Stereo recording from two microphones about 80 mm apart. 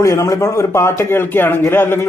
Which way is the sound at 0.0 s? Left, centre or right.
Left.